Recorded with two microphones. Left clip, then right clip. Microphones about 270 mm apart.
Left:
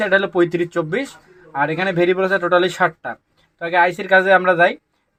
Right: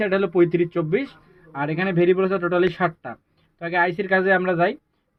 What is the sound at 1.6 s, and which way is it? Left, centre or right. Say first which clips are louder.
Speech: left 4 dB; left.